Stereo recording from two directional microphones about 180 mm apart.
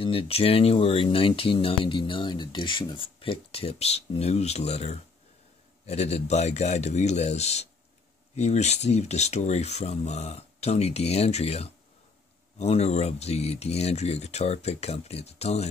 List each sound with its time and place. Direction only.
0.0 s speech: 30° left (ahead or behind)